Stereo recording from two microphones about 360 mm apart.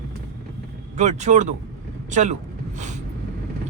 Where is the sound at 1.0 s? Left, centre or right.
Centre.